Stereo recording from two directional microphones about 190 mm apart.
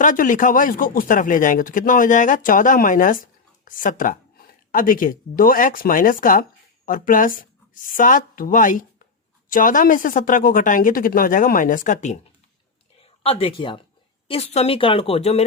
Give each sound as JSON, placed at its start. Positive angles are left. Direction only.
{"t": 0.0, "sound": "speech", "side_deg": 45}
{"t": 13.0, "sound": "a woman's voice", "side_deg": 30}